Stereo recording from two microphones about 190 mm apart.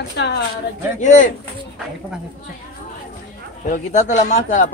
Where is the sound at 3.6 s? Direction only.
40° left (ahead or behind).